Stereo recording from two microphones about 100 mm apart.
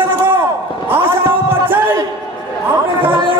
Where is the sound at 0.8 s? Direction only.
20° right (ahead or behind).